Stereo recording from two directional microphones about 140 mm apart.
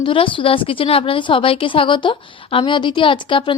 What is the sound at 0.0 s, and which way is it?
Speech, 40° left (ahead or behind).